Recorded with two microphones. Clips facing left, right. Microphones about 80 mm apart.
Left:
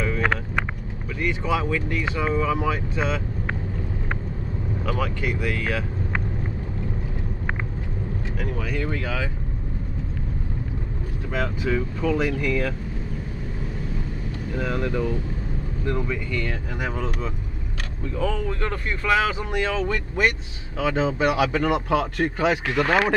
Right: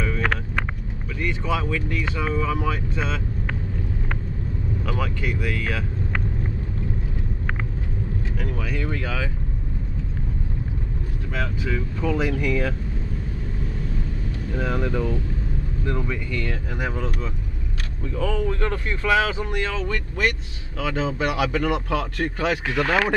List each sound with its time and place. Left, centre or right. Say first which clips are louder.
1.2 s speech: left 1 dB; centre
4.8 s speech: left 3 dB; centre
8.4 s speech: left 2 dB; centre
11.3 s speech: left 3 dB; centre
12.0 s speech: right 2 dB; centre
14.5 s speech: even; centre
18.1 s speech: right 1 dB; centre
22.8 s speech: left 1 dB; left